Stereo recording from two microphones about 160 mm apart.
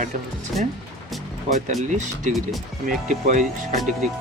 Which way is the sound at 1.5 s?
50° right (ahead or behind).